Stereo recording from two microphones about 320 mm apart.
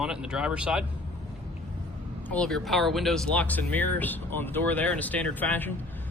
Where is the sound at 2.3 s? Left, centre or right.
Centre.